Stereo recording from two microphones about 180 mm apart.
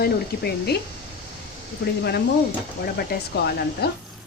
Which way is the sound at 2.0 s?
65° left (ahead or behind).